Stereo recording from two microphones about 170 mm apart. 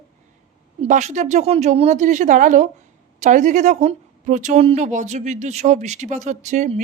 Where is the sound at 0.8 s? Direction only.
45° right (ahead or behind).